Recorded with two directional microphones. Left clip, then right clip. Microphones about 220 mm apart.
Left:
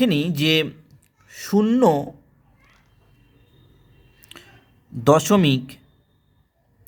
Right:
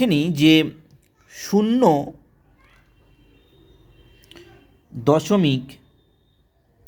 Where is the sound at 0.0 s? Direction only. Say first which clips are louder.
Right 3 dB; centre (ahead or behind).